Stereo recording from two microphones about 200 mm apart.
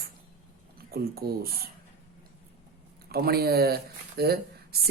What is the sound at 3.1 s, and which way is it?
Speech, 50° right (ahead or behind).